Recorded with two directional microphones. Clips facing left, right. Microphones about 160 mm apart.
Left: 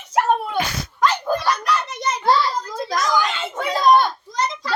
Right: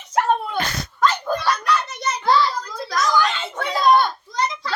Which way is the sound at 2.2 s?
25° left (ahead or behind).